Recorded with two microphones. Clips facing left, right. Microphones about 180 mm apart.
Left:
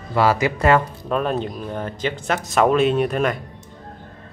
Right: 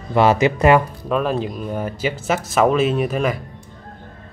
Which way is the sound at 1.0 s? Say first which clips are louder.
Right 2 dB; centre (ahead or behind).